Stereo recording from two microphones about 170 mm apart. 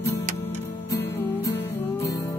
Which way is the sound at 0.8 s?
15° left (ahead or behind).